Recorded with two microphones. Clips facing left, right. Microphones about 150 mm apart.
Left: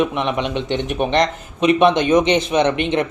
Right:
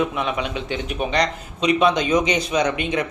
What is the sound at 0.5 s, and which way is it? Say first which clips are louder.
Speech: left 5 dB; 65° left (ahead or behind).